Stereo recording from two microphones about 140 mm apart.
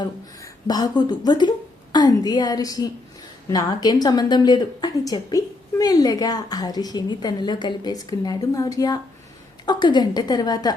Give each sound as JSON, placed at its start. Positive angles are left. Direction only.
{"t": 0.0, "sound": "a woman's voice", "side_deg": 30}